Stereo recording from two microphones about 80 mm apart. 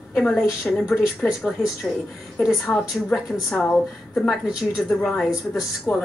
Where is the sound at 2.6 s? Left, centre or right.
Centre.